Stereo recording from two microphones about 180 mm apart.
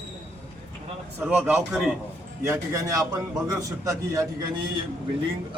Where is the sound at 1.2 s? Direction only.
10° right (ahead or behind).